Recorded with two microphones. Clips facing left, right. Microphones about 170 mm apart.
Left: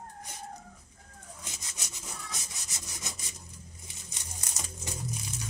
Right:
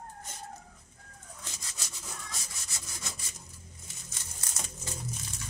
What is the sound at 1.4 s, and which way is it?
Rub, 15° left (ahead or behind).